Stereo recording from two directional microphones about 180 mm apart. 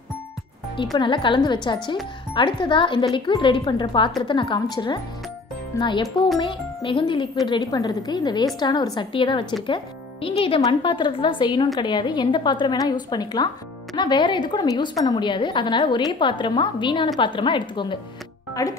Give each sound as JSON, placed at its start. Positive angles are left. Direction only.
{"t": 0.9, "sound": "a woman's voice", "side_deg": 25}
{"t": 6.0, "sound": "speech", "side_deg": 0}
{"t": 6.4, "sound": "a woman's voice", "side_deg": 30}